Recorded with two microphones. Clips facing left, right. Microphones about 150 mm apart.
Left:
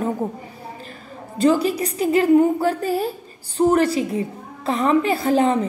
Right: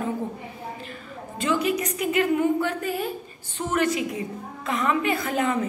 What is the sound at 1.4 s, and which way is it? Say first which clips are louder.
A woman's voice: left 6 dB; 35° left (ahead or behind).